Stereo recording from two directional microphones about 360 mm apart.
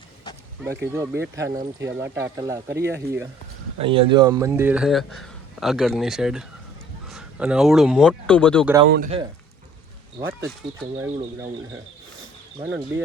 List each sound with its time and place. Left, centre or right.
0.6 s speech: centre
8.9 s speech: right
10.2 s speech: centre
12.5 s speech: centre